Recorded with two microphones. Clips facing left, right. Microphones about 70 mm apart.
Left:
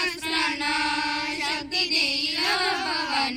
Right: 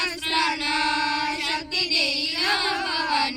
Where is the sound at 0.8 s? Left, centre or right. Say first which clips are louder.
Right 3 dB; right.